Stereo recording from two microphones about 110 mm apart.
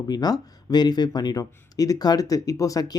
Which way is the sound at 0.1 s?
40° left (ahead or behind).